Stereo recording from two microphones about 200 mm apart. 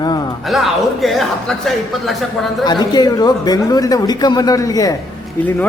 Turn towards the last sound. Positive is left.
turn(degrees=10)  # may be behind; listen again after turning